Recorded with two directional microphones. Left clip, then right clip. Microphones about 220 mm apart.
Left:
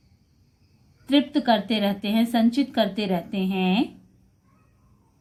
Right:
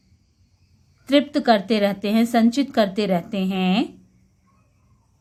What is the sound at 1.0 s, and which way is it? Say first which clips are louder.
A woman's voice: right 4 dB; 35° right (ahead or behind).